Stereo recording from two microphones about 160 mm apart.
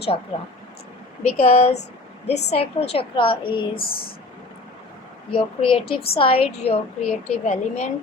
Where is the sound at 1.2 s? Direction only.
40° left (ahead or behind).